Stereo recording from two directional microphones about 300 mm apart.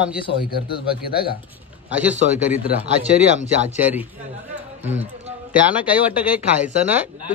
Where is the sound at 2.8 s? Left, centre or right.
Right.